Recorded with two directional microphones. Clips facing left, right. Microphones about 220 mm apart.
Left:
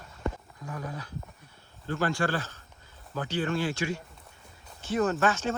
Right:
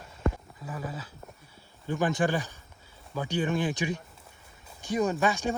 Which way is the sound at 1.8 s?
15° right (ahead or behind).